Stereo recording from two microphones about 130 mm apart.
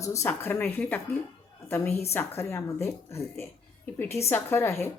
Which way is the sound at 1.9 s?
55° left (ahead or behind).